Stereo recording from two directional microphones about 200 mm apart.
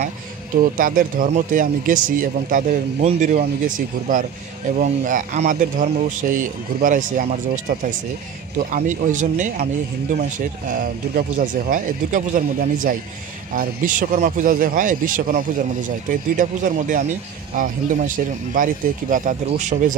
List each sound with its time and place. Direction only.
0.7 s speech: 45° right (ahead or behind)